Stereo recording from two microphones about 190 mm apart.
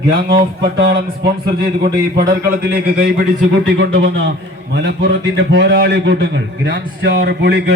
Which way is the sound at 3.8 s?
75° right (ahead or behind).